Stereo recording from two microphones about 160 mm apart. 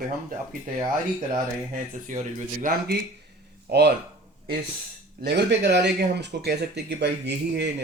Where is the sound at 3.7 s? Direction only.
90° right.